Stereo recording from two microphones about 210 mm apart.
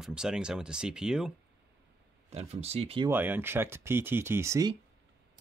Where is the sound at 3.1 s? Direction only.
10° right (ahead or behind).